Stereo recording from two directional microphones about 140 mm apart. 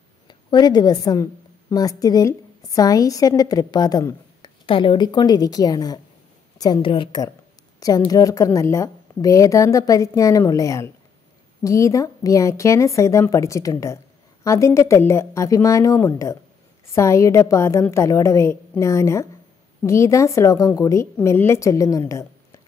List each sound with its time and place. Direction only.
0.3 s a woman's voice: 30° left (ahead or behind)
4.6 s a woman's voice: 40° left (ahead or behind); by 22.6 s 20° left (ahead or behind)